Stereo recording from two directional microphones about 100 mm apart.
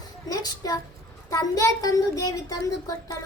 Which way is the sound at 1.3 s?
35° left (ahead or behind).